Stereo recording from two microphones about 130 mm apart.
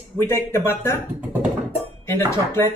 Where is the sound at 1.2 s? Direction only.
15° right (ahead or behind).